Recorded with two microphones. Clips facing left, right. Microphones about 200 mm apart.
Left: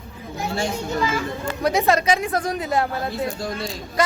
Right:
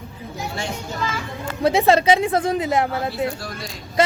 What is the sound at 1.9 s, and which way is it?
A woman's voice, 30° right (ahead or behind).